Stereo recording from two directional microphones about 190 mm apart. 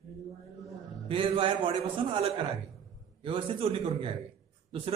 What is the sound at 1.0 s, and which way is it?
Speech, 30° right (ahead or behind).